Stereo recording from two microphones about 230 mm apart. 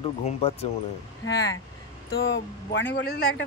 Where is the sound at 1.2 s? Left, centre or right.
Left.